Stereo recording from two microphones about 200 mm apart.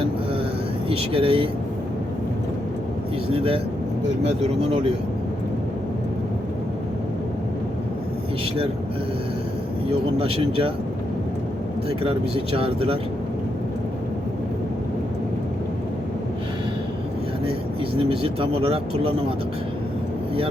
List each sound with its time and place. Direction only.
0.9 s speech: 30° right (ahead or behind)
3.3 s speech: 30° right (ahead or behind)
10.2 s speech: 30° right (ahead or behind)
11.9 s speech: 30° right (ahead or behind)
17.9 s speech: 25° right (ahead or behind)